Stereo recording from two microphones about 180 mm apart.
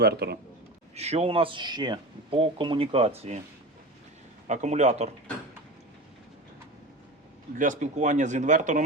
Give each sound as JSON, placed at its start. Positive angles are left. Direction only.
{"t": 0.0, "sound": "a man's voice", "side_deg": -60}
{"t": 0.9, "sound": "speech", "side_deg": -35}
{"t": 4.4, "sound": "speech", "side_deg": -40}
{"t": 7.5, "sound": "speech", "side_deg": -45}